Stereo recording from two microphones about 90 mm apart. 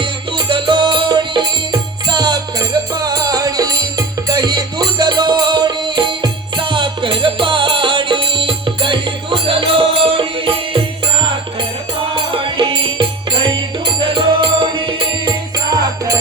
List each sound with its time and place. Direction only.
0.0 s music: 60° right (ahead or behind); by 10.5 s 80° right
12.3 s music: 70° right (ahead or behind)